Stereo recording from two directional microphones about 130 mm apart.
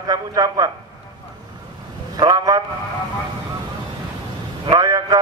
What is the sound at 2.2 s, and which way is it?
Speech, 25° right (ahead or behind).